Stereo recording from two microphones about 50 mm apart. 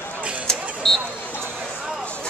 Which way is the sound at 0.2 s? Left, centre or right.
Right.